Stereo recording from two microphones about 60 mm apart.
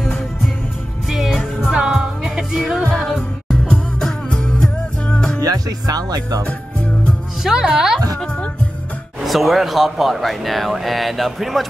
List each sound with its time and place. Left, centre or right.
1.1 s music: centre
3.4 s music: centre
5.4 s music: right
7.4 s speech: centre
9.2 s speech: centre